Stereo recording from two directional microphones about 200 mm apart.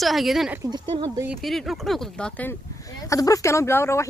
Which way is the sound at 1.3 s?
Centre (ahead or behind).